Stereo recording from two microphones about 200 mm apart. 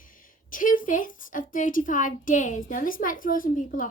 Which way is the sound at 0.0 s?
45° left (ahead or behind).